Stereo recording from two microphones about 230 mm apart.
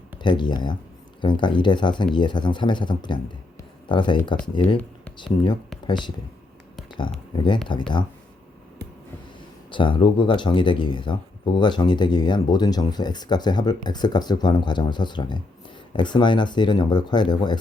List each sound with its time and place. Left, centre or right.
0.2 s speech: centre
3.6 s music: left
4.6 s speech: centre
7.3 s speech: centre
9.7 s speech: left